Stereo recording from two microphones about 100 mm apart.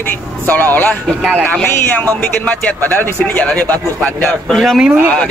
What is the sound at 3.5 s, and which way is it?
Speech, 5° left (ahead or behind).